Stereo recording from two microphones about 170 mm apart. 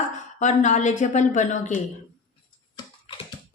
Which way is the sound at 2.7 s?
30° left (ahead or behind).